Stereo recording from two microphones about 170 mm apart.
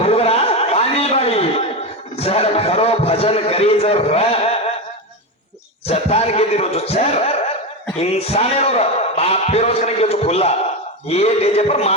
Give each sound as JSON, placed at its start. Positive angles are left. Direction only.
{"t": 0.0, "sound": "a sound", "side_deg": 35}
{"t": 2.1, "sound": "a man's voice", "side_deg": 35}
{"t": 5.9, "sound": "a man's voice", "side_deg": 35}